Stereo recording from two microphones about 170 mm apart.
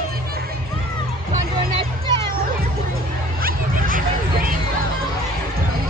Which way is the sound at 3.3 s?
55° right (ahead or behind).